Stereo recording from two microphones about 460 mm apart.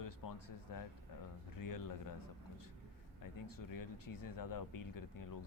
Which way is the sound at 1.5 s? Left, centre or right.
Left.